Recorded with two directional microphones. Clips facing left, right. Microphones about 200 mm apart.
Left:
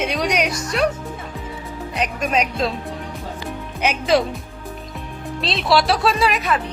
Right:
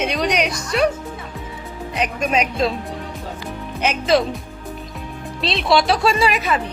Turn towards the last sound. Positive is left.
turn(degrees=0)  # may be behind; listen again after turning